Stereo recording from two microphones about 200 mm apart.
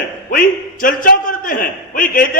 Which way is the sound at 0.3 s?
45° left (ahead or behind).